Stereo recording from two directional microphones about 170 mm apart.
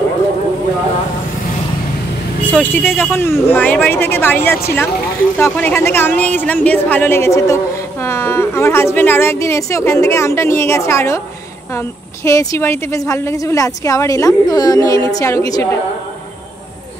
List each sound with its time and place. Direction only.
2.5 s a woman's voice: 10° left (ahead or behind)
12.3 s a woman's voice: 15° left (ahead or behind)